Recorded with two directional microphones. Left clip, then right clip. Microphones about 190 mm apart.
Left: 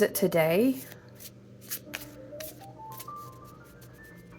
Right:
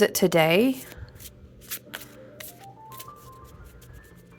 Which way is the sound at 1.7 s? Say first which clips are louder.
Right 1 dB; 35° right (ahead or behind).